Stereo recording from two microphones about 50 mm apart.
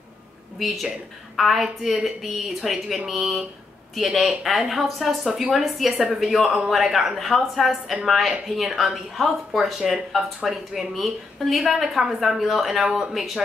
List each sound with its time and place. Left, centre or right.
0.6 s a woman's voice: centre